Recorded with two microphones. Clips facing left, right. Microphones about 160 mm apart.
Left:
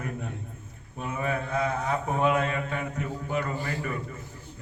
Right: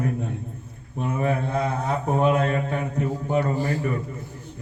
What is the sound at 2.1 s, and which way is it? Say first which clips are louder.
A man's voice: right 5 dB; 35° right (ahead or behind).